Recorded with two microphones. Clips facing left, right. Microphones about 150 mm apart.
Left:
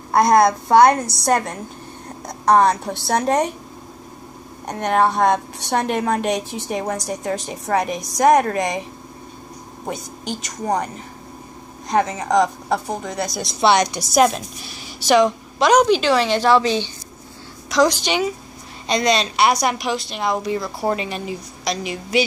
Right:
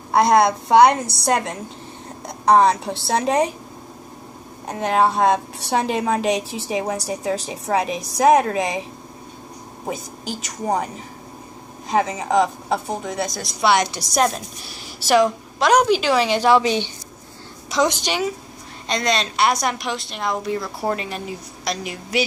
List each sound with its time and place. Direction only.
0.1 s a woman's voice: centre (ahead or behind)
4.6 s a woman's voice: 5° right (ahead or behind)
9.8 s a woman's voice: 5° right (ahead or behind)
11.9 s a woman's voice: 5° right (ahead or behind)
13.4 s a woman's voice: 20° left (ahead or behind)
14.1 s a woman's voice: 5° left (ahead or behind); by 16.9 s 15° right (ahead or behind)
17.7 s a woman's voice: centre (ahead or behind)